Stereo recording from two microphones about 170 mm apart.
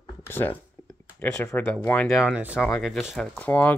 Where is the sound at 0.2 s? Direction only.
10° left (ahead or behind).